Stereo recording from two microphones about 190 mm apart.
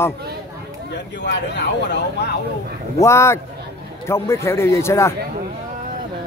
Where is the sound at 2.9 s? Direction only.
15° left (ahead or behind).